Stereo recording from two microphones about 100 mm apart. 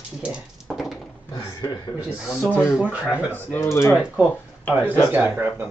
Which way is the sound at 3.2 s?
20° left (ahead or behind).